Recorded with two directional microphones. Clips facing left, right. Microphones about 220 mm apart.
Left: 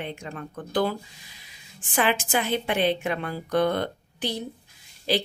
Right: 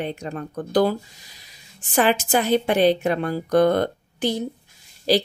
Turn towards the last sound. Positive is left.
turn(degrees=-40)  # may be behind; listen again after turning